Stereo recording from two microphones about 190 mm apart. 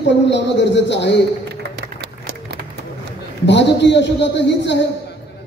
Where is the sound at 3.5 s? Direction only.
65° left (ahead or behind).